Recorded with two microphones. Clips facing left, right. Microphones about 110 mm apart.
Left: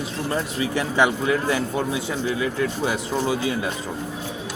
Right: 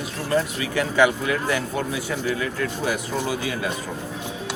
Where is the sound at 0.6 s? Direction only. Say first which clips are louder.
Left 1 dB; 30° left (ahead or behind).